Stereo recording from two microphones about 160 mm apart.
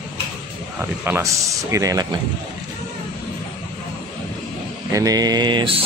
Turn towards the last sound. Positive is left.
turn(degrees=-30)  # may be behind; listen again after turning